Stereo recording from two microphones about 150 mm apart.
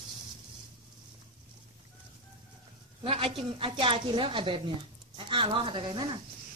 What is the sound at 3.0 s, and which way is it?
A woman's voice, 35° right (ahead or behind).